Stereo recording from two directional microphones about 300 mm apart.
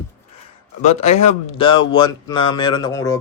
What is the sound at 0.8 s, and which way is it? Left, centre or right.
A man's voice, left.